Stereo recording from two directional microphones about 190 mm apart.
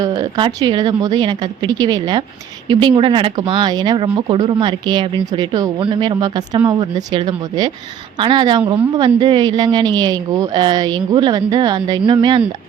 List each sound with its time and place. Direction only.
0.0 s speech: 25° right (ahead or behind)